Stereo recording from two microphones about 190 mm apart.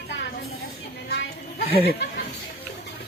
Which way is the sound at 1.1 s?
60° left (ahead or behind).